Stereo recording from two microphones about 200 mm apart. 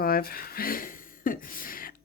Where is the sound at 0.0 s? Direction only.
50° left (ahead or behind).